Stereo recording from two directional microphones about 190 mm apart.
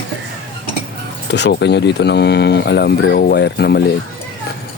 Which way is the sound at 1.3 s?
65° left (ahead or behind).